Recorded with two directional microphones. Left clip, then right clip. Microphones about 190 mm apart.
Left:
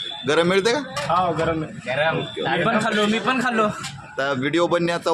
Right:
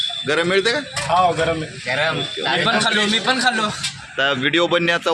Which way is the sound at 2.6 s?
40° left (ahead or behind).